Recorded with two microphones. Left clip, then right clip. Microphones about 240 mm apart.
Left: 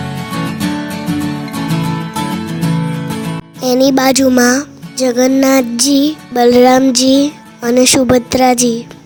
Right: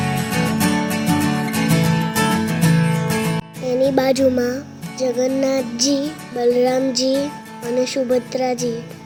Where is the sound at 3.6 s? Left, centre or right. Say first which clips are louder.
Left 6 dB; left.